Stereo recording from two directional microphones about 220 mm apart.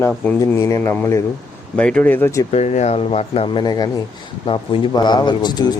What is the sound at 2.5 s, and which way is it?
A man's voice, 30° left (ahead or behind).